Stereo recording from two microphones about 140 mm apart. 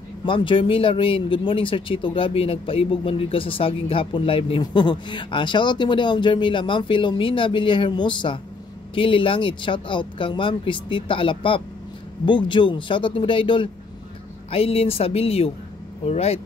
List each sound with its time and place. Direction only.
0.2 s speech: 35° left (ahead or behind)